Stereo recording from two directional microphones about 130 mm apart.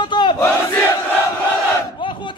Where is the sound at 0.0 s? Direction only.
35° left (ahead or behind).